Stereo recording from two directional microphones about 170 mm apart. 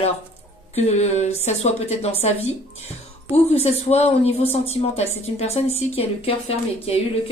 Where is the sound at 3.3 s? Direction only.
40° left (ahead or behind).